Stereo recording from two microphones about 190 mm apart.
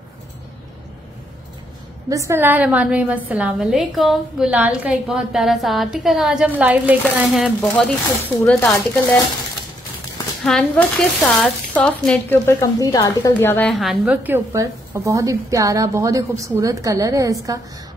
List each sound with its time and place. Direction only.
2.0 s a woman's voice: 15° right (ahead or behind); by 9.2 s 10° left (ahead or behind)
10.4 s a woman's voice: centre (ahead or behind); by 17.6 s 15° right (ahead or behind)